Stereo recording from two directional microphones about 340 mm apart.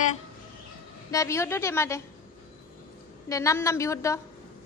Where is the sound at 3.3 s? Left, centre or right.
Centre.